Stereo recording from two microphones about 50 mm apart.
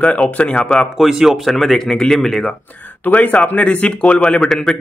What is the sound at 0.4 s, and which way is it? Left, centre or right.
Speech, left.